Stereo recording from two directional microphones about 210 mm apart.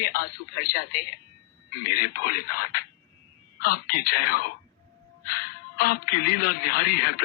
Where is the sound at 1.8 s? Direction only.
45° left (ahead or behind).